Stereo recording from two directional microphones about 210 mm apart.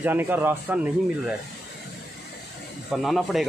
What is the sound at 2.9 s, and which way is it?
Speech, centre (ahead or behind).